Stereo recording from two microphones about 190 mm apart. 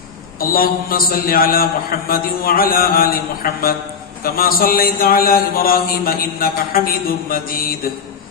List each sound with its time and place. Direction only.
0.3 s a man's voice: 50° left (ahead or behind)